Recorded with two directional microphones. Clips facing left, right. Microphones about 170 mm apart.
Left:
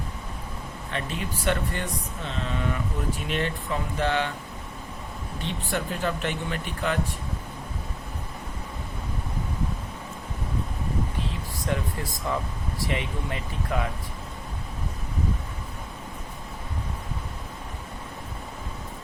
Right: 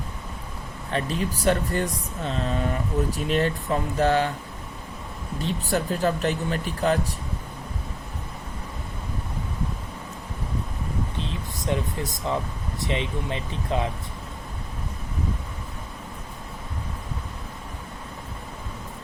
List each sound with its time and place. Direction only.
0.9 s speech: 35° right (ahead or behind)
5.4 s speech: 40° right (ahead or behind)
11.2 s speech: 20° right (ahead or behind)